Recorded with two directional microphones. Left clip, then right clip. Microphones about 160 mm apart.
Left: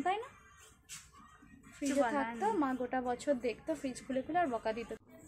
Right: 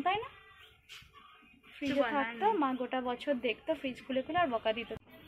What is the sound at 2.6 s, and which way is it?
A woman's voice, centre (ahead or behind).